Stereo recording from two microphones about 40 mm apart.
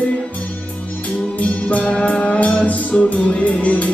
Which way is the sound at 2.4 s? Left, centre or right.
Left.